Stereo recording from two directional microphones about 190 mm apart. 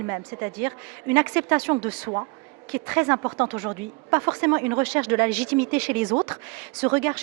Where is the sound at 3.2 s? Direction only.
25° right (ahead or behind).